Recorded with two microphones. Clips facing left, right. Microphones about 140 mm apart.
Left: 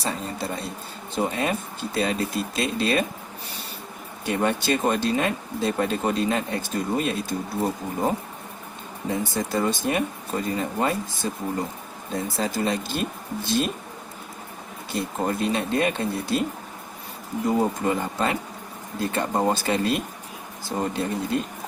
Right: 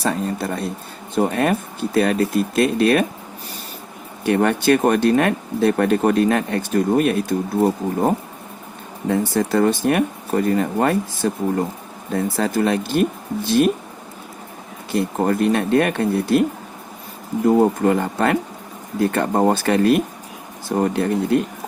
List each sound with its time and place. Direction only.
0.0 s speech: 60° right (ahead or behind)
4.3 s speech: 60° right (ahead or behind)
9.0 s speech: 65° right (ahead or behind)
14.9 s speech: 60° right (ahead or behind)
17.6 s speech: 65° right (ahead or behind)